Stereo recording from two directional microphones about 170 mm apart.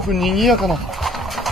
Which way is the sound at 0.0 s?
Centre (ahead or behind).